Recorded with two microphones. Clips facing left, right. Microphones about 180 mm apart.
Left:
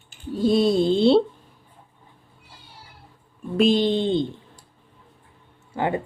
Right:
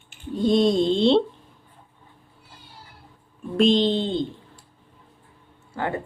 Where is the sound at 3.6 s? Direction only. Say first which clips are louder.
Even; 5° left (ahead or behind).